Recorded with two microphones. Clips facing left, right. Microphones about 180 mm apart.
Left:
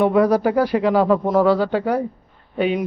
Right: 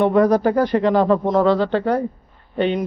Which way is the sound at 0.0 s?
5° left (ahead or behind).